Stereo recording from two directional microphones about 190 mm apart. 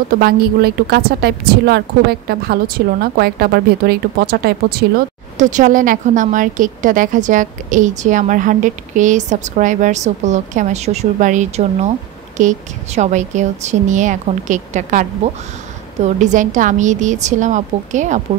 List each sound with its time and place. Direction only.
0.1 s speech: 55° right (ahead or behind)
5.4 s a woman's voice: 40° right (ahead or behind)